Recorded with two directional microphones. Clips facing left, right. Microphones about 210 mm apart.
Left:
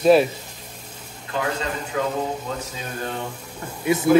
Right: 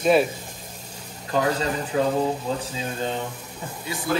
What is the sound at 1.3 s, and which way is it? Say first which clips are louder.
Speech: right 3 dB; 35° right (ahead or behind).